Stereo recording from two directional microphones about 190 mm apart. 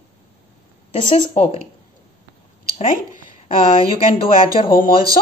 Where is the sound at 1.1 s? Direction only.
30° left (ahead or behind).